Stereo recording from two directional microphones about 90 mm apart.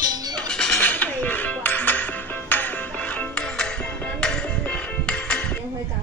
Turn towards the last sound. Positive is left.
turn(degrees=10)  # may be behind; listen again after turning